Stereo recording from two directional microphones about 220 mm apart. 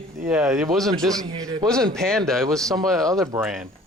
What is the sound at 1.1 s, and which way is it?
Speech, 15° right (ahead or behind).